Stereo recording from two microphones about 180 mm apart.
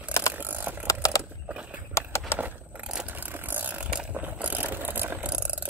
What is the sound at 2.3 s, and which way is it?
Vehicle, 10° right (ahead or behind).